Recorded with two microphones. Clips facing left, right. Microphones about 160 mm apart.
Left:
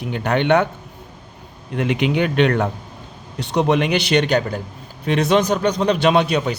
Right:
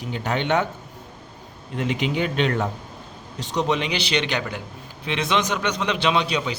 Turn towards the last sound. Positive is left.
turn(degrees=55)  # may be behind; listen again after turning